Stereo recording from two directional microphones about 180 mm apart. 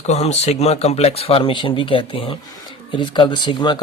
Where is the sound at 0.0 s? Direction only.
35° left (ahead or behind).